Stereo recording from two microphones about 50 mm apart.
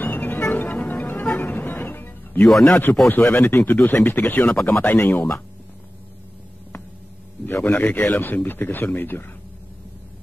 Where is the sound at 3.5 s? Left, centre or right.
Left.